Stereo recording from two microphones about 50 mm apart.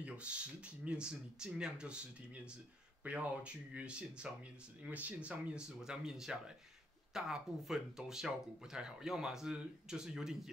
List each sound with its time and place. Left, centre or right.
0.0 s speech: right